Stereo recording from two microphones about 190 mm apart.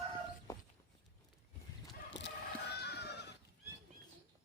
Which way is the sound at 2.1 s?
65° left (ahead or behind).